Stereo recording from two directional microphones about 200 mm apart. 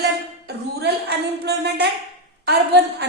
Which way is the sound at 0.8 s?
55° right (ahead or behind).